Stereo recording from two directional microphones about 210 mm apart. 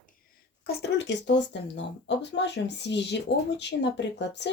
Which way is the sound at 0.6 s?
50° left (ahead or behind).